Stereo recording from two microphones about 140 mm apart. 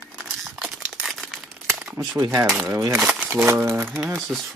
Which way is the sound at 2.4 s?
Centre (ahead or behind).